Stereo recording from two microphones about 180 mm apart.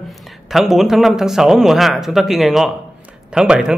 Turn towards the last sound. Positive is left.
turn(degrees=-5)  # may be behind; listen again after turning